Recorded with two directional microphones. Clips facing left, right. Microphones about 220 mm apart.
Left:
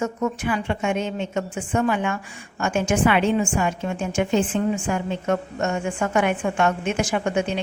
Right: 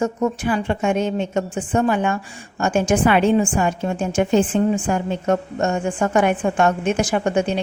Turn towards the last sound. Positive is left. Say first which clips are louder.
# right 3 dB
turn(degrees=-35)  # may be behind; listen again after turning